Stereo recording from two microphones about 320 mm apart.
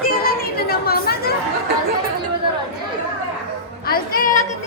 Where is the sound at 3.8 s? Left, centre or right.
Left.